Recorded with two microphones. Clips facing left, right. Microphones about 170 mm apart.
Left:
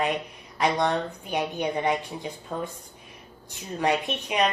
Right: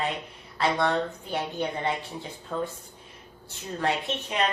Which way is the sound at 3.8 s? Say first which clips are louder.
Left 3 dB; 15° left (ahead or behind).